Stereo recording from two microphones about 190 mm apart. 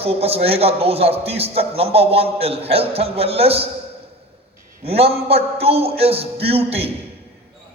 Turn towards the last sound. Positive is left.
turn(degrees=-30)  # may be behind; listen again after turning